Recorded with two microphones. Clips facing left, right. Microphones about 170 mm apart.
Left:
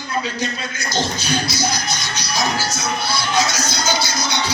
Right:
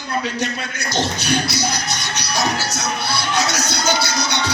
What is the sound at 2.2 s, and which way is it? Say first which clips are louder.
Music: even; 65° right (ahead or behind).